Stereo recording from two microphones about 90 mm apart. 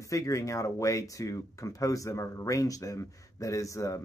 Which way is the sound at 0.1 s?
35° left (ahead or behind).